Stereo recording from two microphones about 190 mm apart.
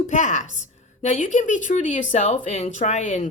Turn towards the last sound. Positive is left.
turn(degrees=40)  # may be behind; listen again after turning